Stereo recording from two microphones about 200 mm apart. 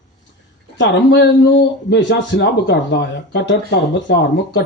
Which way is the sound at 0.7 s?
60° left (ahead or behind).